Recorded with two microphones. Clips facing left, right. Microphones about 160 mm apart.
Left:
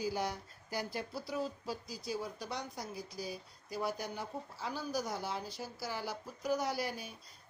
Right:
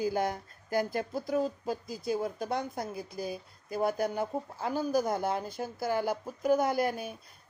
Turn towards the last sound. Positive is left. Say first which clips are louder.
# right 8 dB
turn(degrees=-55)  # may be behind; listen again after turning